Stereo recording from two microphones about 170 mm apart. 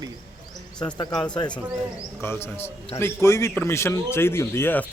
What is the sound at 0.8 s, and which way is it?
A man's voice, 25° left (ahead or behind).